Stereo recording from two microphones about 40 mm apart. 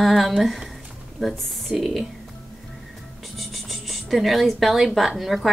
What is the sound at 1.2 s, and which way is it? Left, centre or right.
Speech, centre.